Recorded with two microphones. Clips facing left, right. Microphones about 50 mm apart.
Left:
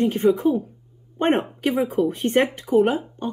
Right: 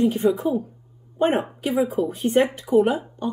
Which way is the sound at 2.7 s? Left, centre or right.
Left.